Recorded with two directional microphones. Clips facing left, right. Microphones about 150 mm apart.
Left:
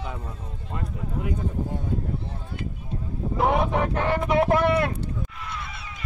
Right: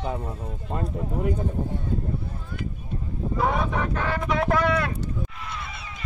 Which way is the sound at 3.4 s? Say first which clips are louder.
Left 3 dB; 20° left (ahead or behind).